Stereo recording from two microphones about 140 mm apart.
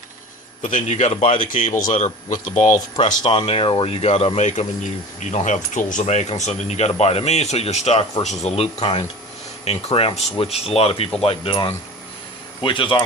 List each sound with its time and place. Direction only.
0.6 s speech: 55° left (ahead or behind)
1.5 s speech: 65° left (ahead or behind)
3.2 s speech: 45° left (ahead or behind)